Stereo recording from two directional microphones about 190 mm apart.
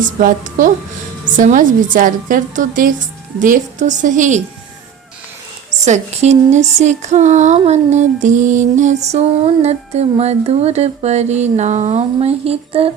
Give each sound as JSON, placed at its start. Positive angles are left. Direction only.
{"t": 0.0, "sound": "a woman's voice", "side_deg": -45}
{"t": 3.4, "sound": "music", "side_deg": -40}
{"t": 5.8, "sound": "music", "side_deg": -35}